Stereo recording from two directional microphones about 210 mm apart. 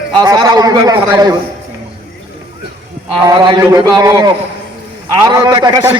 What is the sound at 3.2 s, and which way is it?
A man's voice, 20° right (ahead or behind).